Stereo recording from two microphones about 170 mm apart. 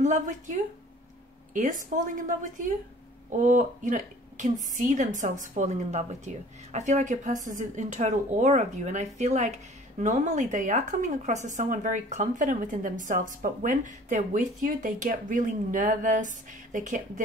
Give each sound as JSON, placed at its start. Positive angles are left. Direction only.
{"t": 0.0, "sound": "a woman's voice", "side_deg": -45}
{"t": 3.3, "sound": "speech", "side_deg": -50}